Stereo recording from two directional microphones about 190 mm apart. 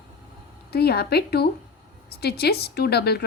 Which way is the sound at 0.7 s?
55° left (ahead or behind).